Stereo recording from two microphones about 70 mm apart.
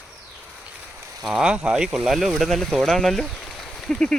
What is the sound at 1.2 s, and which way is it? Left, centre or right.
Speech, centre.